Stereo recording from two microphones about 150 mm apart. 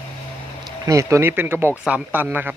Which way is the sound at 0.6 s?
20° right (ahead or behind).